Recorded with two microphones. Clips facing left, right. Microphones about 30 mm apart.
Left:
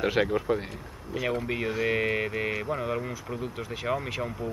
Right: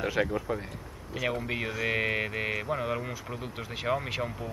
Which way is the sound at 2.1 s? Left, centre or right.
Centre.